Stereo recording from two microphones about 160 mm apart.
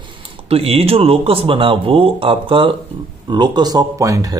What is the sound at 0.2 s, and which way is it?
Speech, 35° right (ahead or behind).